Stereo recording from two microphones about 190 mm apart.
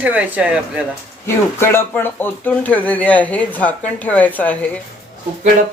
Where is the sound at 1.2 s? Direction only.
15° left (ahead or behind).